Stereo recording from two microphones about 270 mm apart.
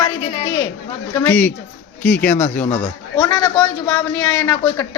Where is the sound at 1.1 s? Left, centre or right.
Centre.